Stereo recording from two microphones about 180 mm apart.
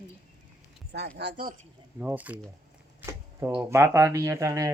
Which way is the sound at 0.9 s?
60° right (ahead or behind).